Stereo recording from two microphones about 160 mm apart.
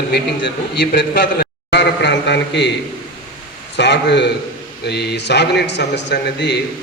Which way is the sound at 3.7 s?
90° left.